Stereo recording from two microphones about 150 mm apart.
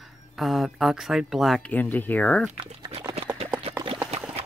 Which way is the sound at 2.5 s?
35° right (ahead or behind).